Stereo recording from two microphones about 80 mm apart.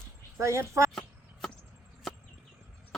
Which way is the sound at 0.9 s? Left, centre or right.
Centre.